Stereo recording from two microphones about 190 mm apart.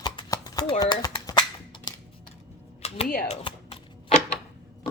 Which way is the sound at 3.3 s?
30° left (ahead or behind).